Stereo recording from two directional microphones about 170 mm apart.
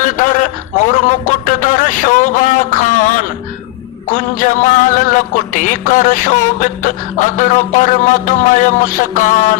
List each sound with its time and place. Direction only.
0.0 s a man's voice: 50° left (ahead or behind)
4.1 s music: 50° left (ahead or behind)